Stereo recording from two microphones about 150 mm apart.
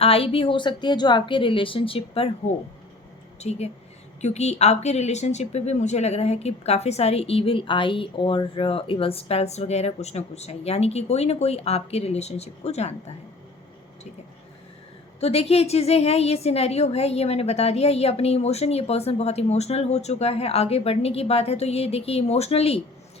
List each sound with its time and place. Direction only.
0.0 s a woman's voice: 40° left (ahead or behind)
3.4 s speech: 45° left (ahead or behind)
15.2 s speech: 40° left (ahead or behind)